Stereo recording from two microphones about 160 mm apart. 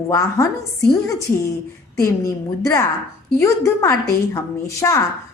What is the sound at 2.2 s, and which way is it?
A woman's voice, 20° left (ahead or behind).